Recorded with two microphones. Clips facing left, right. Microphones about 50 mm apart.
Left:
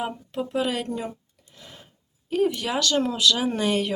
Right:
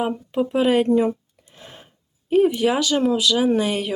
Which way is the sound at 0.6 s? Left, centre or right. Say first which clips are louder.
Right 14 dB; right.